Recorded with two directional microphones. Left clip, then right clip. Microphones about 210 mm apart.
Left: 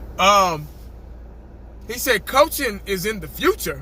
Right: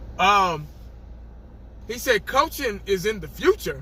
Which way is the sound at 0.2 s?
20° left (ahead or behind).